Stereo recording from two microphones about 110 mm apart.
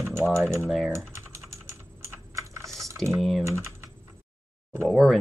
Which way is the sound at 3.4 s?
25° right (ahead or behind).